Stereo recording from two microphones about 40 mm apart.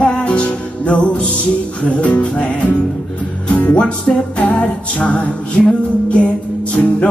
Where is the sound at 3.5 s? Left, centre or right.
Left.